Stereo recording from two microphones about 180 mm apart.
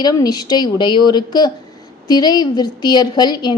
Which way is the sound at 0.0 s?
20° left (ahead or behind).